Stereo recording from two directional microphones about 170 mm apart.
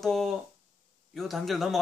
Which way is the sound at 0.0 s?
Centre (ahead or behind).